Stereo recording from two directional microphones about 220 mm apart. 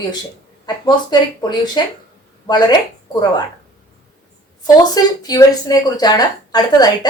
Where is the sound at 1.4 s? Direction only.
20° left (ahead or behind).